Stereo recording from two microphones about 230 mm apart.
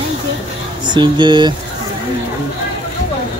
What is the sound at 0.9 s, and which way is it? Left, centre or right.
Speech, centre.